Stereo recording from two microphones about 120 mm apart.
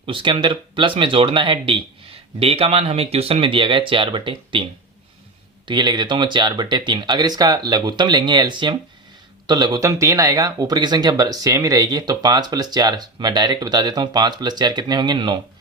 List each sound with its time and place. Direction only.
0.0 s speech: 45° right (ahead or behind)